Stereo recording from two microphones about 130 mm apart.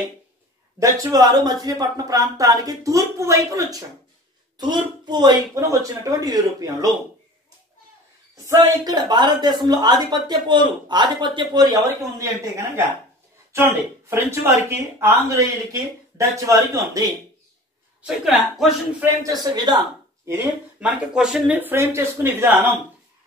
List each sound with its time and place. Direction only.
0.7 s a woman's voice: 25° right (ahead or behind)
8.5 s a woman's voice: 30° right (ahead or behind)
18.0 s a man's voice: 5° right (ahead or behind)
19.2 s speech: 30° right (ahead or behind)
20.8 s speech: 5° right (ahead or behind)